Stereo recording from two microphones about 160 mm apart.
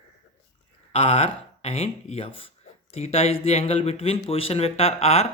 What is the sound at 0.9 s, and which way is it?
Speech, 40° left (ahead or behind).